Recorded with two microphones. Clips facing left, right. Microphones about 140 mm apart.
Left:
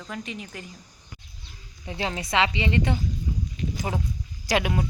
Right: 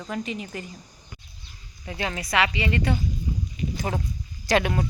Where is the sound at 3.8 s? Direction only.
10° left (ahead or behind).